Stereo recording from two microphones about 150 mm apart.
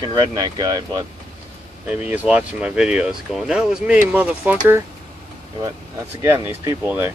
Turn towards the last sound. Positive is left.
turn(degrees=-15)  # may be behind; listen again after turning